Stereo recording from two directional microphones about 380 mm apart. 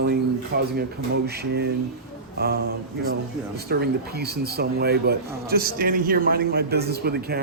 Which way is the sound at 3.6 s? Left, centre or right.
Right.